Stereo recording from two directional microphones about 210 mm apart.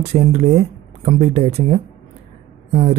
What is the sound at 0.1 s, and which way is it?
Speech, 30° right (ahead or behind).